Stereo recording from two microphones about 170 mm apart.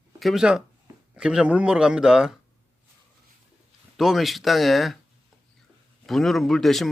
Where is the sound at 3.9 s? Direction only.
Centre (ahead or behind).